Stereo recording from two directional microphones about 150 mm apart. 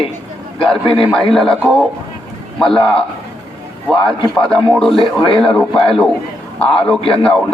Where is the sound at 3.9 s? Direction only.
35° left (ahead or behind).